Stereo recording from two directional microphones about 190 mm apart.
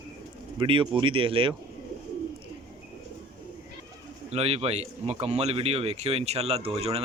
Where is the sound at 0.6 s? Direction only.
25° right (ahead or behind).